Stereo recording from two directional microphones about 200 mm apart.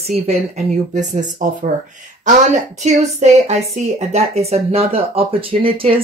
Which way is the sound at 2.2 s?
35° right (ahead or behind).